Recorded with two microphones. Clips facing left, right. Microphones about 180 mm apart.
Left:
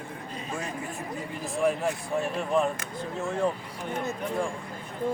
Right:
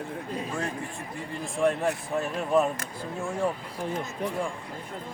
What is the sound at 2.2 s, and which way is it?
Speech, 5° right (ahead or behind).